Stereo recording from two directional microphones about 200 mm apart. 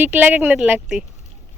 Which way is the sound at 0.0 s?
10° right (ahead or behind).